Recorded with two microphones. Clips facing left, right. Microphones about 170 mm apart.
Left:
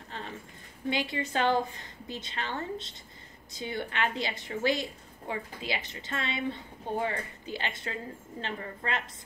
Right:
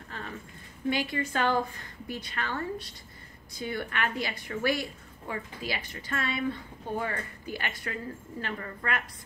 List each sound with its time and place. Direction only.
0.8 s a woman's voice: 20° left (ahead or behind)